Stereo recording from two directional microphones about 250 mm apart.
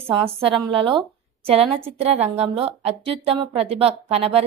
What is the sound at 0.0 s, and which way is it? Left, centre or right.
A woman's voice, right.